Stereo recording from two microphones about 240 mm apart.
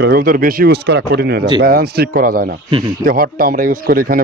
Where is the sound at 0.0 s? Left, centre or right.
Right.